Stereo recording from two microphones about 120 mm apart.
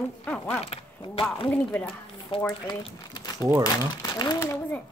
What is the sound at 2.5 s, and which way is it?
Speech, 35° left (ahead or behind).